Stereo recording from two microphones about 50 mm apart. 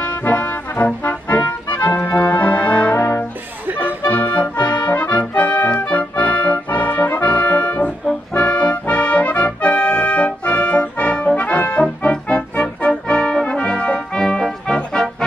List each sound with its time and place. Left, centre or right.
0.2 s music: left
2.1 s brass instrument: left
3.8 s music: left
11.3 s brass instrument: left; by 15.2 s centre